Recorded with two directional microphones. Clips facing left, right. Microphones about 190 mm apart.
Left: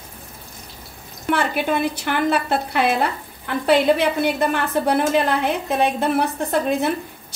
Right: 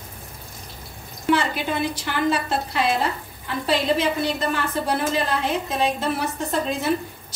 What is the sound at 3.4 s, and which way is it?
A woman's voice, 60° left (ahead or behind).